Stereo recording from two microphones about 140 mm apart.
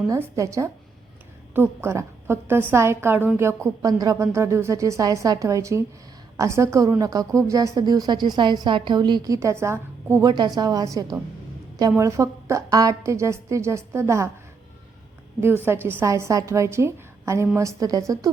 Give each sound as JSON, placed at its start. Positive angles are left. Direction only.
{"t": 0.1, "sound": "a woman's voice", "side_deg": -20}
{"t": 10.2, "sound": "a woman's voice", "side_deg": -30}
{"t": 15.4, "sound": "a woman's voice", "side_deg": -15}